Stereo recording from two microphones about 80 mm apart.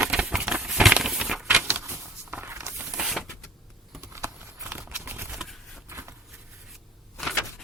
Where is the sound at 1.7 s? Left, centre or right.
Right.